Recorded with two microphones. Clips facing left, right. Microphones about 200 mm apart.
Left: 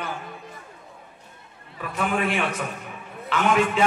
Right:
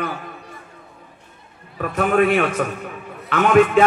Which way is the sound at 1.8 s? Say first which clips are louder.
Right 8 dB; 50° right (ahead or behind).